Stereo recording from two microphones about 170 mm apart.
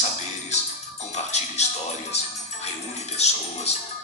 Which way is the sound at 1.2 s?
40° left (ahead or behind).